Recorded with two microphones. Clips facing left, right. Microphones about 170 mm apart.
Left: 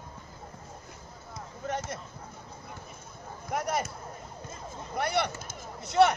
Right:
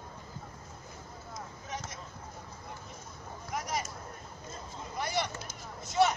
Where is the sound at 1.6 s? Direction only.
60° left (ahead or behind).